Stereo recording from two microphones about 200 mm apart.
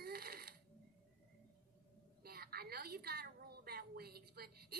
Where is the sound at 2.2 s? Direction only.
50° right (ahead or behind).